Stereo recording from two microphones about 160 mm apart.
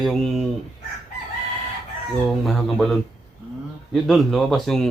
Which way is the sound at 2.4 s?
Centre (ahead or behind).